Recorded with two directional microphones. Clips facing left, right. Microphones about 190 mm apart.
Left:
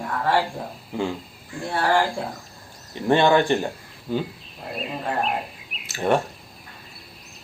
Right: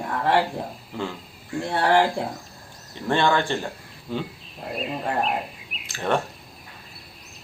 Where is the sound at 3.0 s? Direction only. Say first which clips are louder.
Left 4 dB; 20° left (ahead or behind).